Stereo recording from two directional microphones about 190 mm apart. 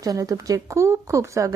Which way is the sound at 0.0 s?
20° right (ahead or behind).